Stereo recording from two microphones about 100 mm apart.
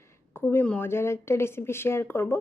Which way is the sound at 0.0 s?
25° left (ahead or behind).